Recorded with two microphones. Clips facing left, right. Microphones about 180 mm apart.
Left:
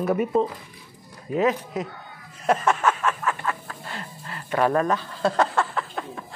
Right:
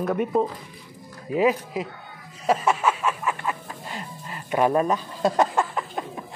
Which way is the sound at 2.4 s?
5° right (ahead or behind).